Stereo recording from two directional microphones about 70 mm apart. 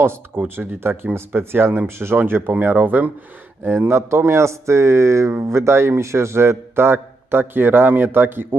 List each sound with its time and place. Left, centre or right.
0.0 s speech: right
3.6 s speech: right